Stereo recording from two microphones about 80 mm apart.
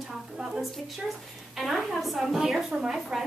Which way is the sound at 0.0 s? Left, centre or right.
Centre.